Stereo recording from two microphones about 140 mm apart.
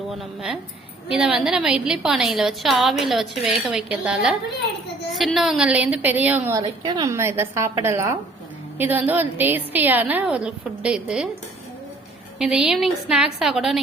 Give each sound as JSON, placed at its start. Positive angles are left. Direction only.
{"t": 0.1, "sound": "a woman's voice", "side_deg": 0}
{"t": 6.5, "sound": "a woman's voice", "side_deg": -30}
{"t": 7.1, "sound": "a woman's voice", "side_deg": -20}
{"t": 12.4, "sound": "a woman's voice", "side_deg": -5}